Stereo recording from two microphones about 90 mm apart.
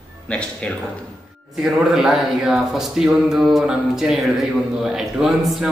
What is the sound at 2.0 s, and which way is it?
Speech, 5° right (ahead or behind).